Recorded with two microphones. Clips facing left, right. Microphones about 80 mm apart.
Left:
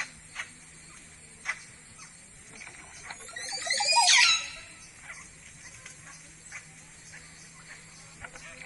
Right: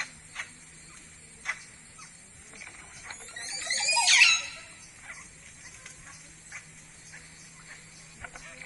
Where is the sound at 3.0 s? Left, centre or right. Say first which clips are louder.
Left 2 dB; centre.